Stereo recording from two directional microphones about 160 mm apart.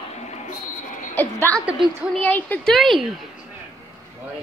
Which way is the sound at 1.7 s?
Centre (ahead or behind).